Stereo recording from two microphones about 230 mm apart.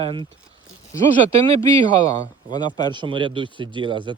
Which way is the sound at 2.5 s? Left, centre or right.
Centre.